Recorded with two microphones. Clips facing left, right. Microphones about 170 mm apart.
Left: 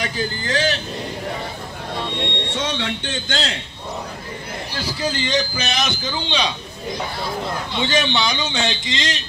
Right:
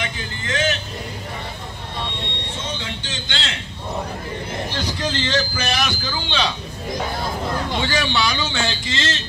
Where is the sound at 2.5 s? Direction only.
75° left (ahead or behind).